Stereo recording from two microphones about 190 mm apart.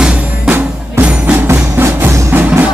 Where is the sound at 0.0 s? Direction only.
5° right (ahead or behind).